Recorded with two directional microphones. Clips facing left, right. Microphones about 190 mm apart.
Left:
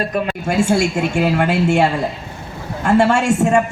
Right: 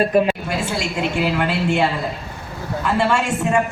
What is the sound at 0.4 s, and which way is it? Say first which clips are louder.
A man's voice: left 8 dB; 45° left (ahead or behind).